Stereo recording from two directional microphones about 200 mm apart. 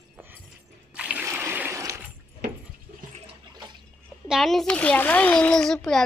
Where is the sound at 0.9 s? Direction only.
5° right (ahead or behind).